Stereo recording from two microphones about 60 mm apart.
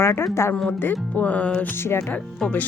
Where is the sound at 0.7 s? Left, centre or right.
Left.